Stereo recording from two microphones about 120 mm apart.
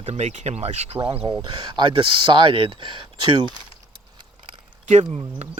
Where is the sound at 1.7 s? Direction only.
45° right (ahead or behind).